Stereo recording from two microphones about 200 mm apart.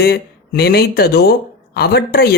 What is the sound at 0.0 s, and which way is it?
Speech, 50° left (ahead or behind).